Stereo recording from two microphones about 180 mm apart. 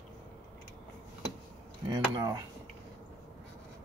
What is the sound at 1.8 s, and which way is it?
Speech, 20° right (ahead or behind).